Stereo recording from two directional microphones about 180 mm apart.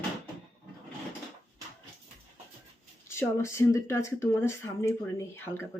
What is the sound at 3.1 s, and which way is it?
Speech, 15° left (ahead or behind).